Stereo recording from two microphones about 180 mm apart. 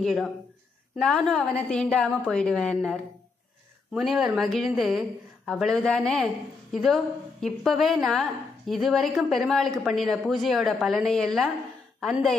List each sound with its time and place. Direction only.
0.0 s a woman's voice: centre (ahead or behind)